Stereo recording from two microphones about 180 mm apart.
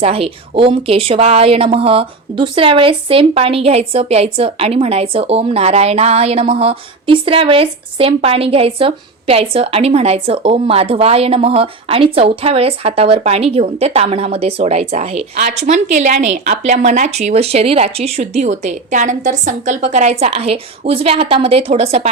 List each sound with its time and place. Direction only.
0.0 s speech: 30° right (ahead or behind)